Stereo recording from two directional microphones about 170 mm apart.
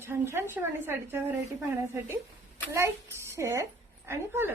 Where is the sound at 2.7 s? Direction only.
15° right (ahead or behind).